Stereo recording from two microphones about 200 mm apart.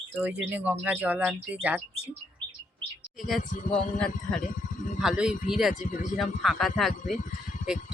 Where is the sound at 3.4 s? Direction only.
40° left (ahead or behind).